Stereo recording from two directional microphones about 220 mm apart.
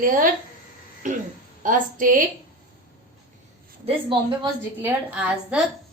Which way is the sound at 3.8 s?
25° right (ahead or behind).